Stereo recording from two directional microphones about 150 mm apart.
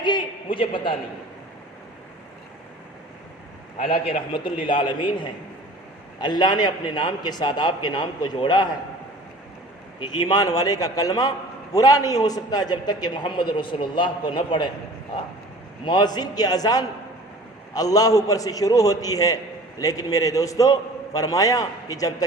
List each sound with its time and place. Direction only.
0.0 s a sound: 35° left (ahead or behind)
3.8 s a man's voice: 40° left (ahead or behind)
10.0 s a man's voice: 30° left (ahead or behind)
15.8 s a man's voice: 30° left (ahead or behind)